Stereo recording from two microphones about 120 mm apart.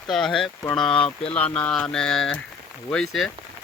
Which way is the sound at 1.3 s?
10° left (ahead or behind).